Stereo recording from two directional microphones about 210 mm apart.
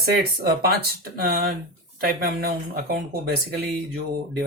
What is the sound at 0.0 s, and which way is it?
Speech, 45° right (ahead or behind).